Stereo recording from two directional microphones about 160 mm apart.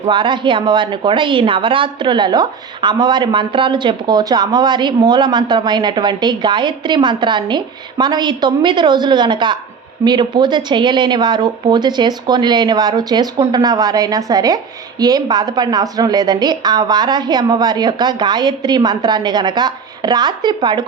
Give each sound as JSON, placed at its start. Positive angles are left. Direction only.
{"t": 0.0, "sound": "speech", "side_deg": -30}